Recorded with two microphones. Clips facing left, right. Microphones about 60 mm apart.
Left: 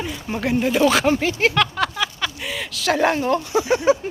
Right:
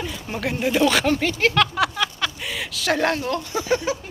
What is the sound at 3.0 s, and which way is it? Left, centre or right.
Speech, left.